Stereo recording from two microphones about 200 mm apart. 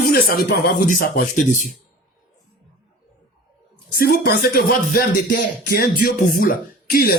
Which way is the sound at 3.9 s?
50° left (ahead or behind).